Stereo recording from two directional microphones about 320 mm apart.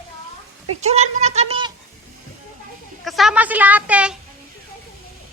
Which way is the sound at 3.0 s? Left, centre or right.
Centre.